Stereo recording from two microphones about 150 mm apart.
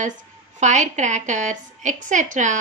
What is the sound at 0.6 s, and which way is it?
A woman's voice, 55° right (ahead or behind).